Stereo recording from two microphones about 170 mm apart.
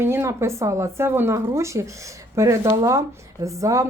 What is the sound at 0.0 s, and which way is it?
Speech, 15° right (ahead or behind).